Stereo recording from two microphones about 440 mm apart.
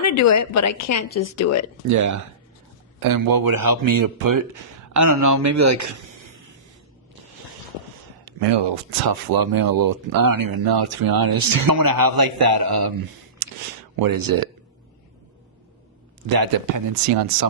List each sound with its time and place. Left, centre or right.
0.0 s a woman's voice: left
1.9 s speech: right
8.2 s speech: right
13.4 s a sound: right
13.9 s speech: right
16.3 s speech: right